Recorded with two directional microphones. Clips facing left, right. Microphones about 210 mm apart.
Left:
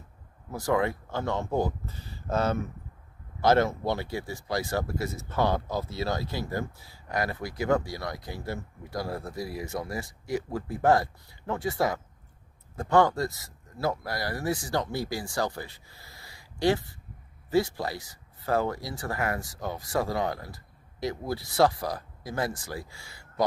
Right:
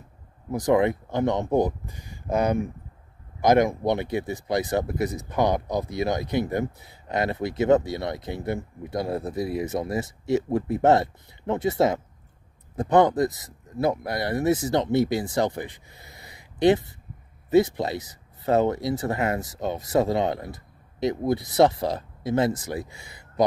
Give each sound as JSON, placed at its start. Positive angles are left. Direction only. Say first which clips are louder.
{"t": 0.5, "sound": "speech", "louder": "right 6 dB", "side_deg": -20}